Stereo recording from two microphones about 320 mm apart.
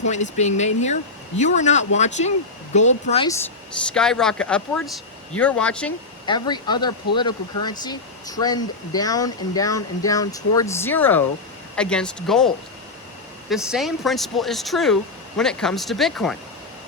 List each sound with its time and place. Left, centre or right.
0.0 s speech: left
3.8 s speech: centre
13.5 s speech: centre